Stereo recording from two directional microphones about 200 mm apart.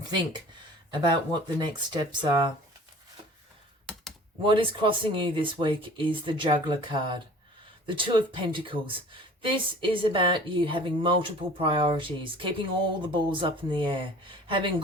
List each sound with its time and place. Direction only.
1.0 s a woman's voice: 20° right (ahead or behind)
4.4 s a woman's voice: 25° right (ahead or behind)